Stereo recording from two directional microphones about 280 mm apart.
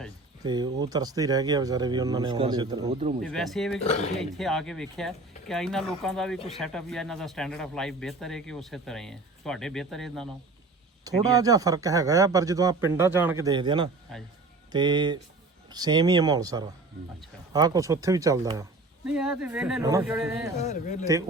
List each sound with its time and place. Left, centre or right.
0.4 s speech: centre
3.2 s speech: centre
3.8 s speech: left
4.2 s speech: centre
11.0 s speech: centre
20.6 s speech: left